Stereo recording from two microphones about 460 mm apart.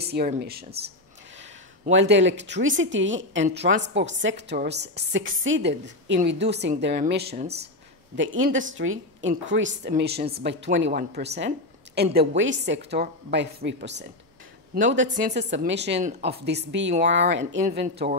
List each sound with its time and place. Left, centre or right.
0.0 s a woman's voice: centre